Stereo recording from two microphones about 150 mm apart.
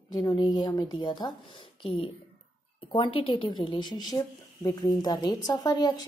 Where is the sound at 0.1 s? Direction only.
25° left (ahead or behind).